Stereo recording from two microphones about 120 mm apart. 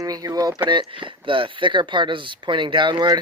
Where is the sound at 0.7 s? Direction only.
45° right (ahead or behind).